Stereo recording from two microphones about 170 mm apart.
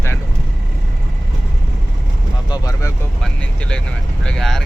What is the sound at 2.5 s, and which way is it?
Vehicle, 20° left (ahead or behind).